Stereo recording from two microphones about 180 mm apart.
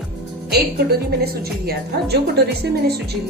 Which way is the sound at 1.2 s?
60° right (ahead or behind).